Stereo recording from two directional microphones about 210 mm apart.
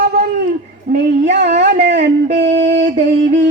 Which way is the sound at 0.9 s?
55° right (ahead or behind).